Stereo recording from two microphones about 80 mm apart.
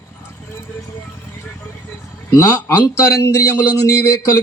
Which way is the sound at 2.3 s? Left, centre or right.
Left.